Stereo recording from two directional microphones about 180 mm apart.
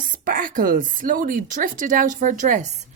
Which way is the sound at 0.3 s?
50° right (ahead or behind).